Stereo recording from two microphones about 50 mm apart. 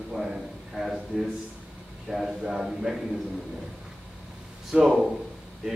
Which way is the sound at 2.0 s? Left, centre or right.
Centre.